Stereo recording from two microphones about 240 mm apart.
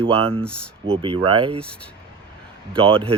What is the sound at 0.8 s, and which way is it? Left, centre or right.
Speech, right.